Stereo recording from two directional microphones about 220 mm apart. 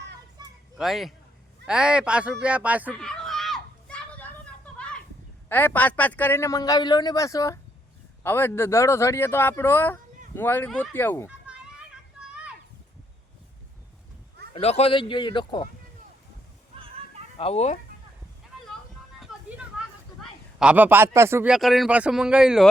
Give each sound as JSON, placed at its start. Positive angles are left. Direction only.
{"t": 0.4, "sound": "children playing", "side_deg": -20}
{"t": 0.8, "sound": "a man's voice", "side_deg": 0}
{"t": 1.6, "sound": "fowl", "side_deg": -5}
{"t": 4.8, "sound": "a sound", "side_deg": 5}
{"t": 5.5, "sound": "a man's voice", "side_deg": 10}
{"t": 11.3, "sound": "children playing", "side_deg": -5}
{"t": 14.5, "sound": "speech", "side_deg": 30}
{"t": 17.3, "sound": "speech", "side_deg": 30}
{"t": 20.6, "sound": "a man's voice", "side_deg": -5}